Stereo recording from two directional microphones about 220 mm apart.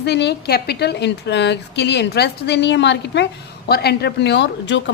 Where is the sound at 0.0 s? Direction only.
50° left (ahead or behind).